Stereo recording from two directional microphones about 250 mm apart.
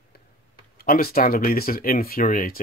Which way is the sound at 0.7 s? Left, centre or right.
Left.